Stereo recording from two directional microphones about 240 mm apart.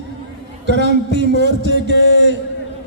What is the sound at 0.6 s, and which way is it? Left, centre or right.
A man's voice, right.